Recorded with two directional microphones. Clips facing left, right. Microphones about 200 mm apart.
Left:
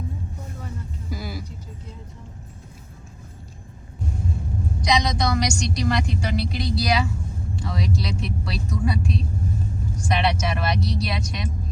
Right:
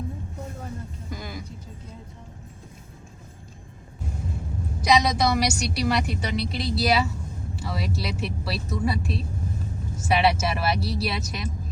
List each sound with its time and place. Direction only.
1.1 s music: 5° left (ahead or behind)
4.8 s a woman's voice: 5° right (ahead or behind)